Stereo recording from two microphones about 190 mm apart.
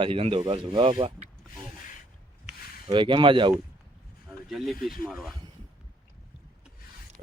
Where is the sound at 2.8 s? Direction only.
25° right (ahead or behind).